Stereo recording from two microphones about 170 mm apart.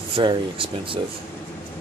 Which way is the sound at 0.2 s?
30° right (ahead or behind).